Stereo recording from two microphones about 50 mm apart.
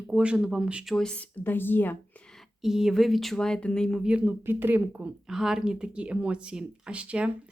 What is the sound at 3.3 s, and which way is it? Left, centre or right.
Speech, centre.